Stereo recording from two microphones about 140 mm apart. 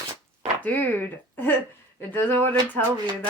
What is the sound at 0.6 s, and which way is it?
Speech, 10° left (ahead or behind).